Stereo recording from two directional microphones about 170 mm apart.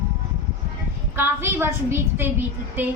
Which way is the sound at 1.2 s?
15° right (ahead or behind).